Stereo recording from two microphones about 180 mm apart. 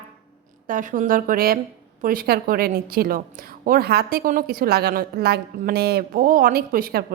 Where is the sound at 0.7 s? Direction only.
45° right (ahead or behind).